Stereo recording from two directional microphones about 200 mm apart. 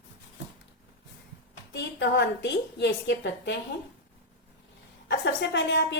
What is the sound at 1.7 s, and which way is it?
A woman's voice, 60° left (ahead or behind).